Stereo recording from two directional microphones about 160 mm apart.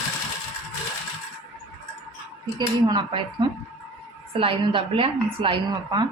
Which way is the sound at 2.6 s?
30° right (ahead or behind).